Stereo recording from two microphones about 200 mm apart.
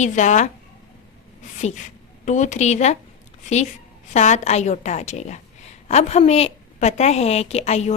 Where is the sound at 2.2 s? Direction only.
35° left (ahead or behind).